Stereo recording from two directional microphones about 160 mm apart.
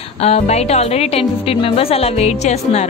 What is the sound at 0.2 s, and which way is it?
Music, 40° left (ahead or behind).